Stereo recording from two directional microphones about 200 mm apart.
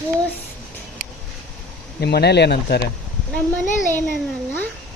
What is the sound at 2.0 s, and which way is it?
Speech, 55° left (ahead or behind).